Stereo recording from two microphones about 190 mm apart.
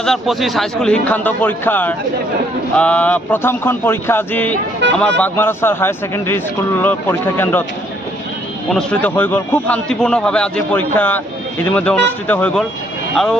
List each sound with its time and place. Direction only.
0.0 s a man's voice: centre (ahead or behind)
8.7 s a man's voice: 5° left (ahead or behind)